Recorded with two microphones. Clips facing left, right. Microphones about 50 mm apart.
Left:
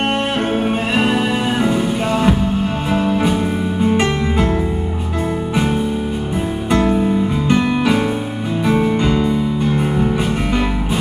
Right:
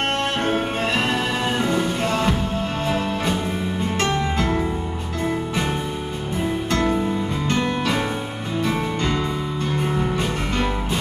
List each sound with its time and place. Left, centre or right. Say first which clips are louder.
0.9 s music: left 7 dB; centre
6.7 s music: left 8 dB; centre